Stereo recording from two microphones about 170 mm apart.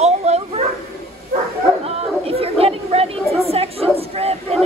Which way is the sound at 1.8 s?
35° right (ahead or behind).